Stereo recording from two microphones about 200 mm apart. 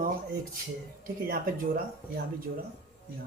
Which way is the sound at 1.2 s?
45° right (ahead or behind).